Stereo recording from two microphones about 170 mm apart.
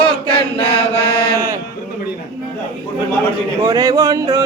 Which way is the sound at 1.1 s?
70° left (ahead or behind).